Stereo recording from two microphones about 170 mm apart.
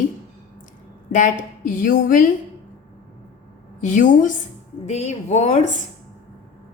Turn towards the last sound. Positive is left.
turn(degrees=40)  # may be behind; listen again after turning